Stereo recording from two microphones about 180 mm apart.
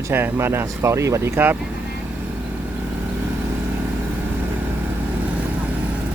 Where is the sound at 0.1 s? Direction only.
15° right (ahead or behind).